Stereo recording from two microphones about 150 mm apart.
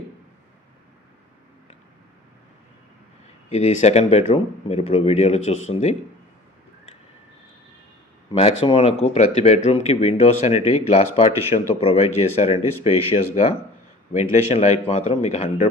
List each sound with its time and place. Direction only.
3.5 s speech: 50° left (ahead or behind)
8.3 s speech: 40° left (ahead or behind)